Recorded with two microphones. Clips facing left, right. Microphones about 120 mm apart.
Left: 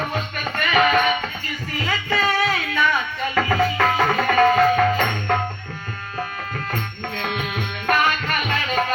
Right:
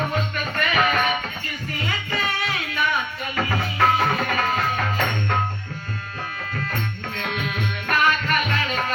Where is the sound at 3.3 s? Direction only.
65° left (ahead or behind).